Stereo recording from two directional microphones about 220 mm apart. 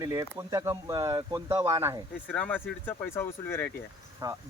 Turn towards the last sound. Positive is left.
turn(degrees=-15)  # may be behind; listen again after turning